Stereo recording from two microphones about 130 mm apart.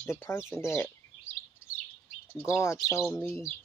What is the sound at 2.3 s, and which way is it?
Speech, 20° left (ahead or behind).